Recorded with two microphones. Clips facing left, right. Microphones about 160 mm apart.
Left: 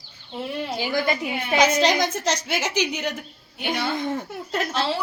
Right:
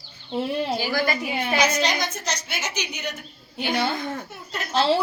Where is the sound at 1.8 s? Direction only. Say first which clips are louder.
Left 5 dB; 90° left.